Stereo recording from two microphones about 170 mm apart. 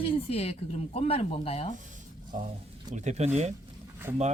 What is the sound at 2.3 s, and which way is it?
Speech, 45° right (ahead or behind).